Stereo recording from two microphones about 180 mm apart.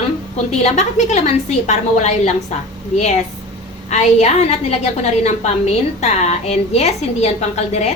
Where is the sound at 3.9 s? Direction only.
40° left (ahead or behind).